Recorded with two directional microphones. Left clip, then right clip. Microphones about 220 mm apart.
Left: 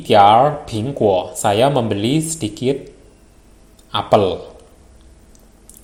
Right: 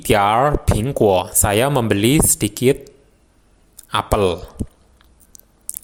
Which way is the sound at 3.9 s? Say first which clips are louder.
Left 3 dB; 40° right (ahead or behind).